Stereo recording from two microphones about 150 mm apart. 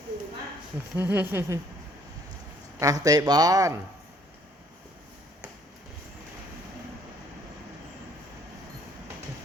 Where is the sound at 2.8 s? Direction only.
25° right (ahead or behind).